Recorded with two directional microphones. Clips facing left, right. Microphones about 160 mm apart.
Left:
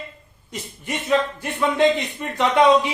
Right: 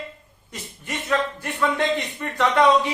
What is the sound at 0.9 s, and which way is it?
Speech, 20° left (ahead or behind).